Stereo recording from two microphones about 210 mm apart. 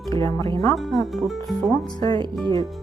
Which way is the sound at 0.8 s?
Centre (ahead or behind).